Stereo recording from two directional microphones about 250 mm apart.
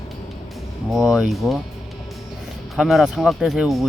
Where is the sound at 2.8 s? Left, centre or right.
Centre.